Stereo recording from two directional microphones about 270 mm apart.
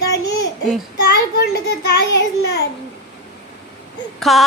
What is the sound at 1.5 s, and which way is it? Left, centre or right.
Child singing, left.